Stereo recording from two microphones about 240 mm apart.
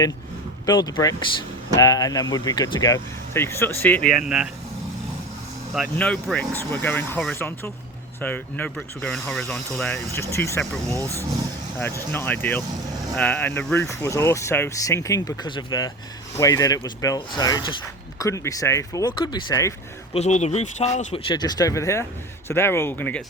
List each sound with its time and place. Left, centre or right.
0.6 s speech: centre
5.7 s speech: centre
12.1 s speech: centre
20.1 s speech: left; by 23.2 s centre